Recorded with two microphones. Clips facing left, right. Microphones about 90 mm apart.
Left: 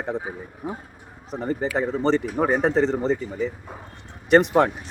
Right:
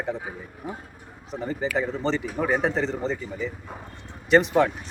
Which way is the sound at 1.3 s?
50° left (ahead or behind).